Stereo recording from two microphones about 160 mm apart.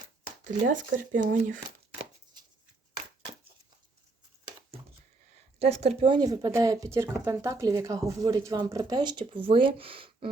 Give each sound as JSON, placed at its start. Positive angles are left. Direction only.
{"t": 0.4, "sound": "speech", "side_deg": -55}
{"t": 5.5, "sound": "speech", "side_deg": -40}
{"t": 6.1, "sound": "speech", "side_deg": -25}